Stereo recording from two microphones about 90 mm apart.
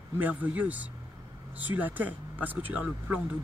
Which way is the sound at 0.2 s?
20° right (ahead or behind).